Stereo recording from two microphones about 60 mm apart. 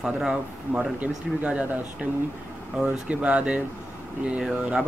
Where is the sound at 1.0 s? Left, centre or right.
Right.